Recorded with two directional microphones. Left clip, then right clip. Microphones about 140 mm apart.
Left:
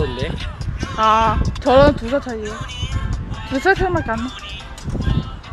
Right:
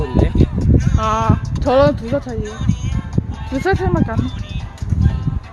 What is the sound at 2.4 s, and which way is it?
Music, 40° right (ahead or behind).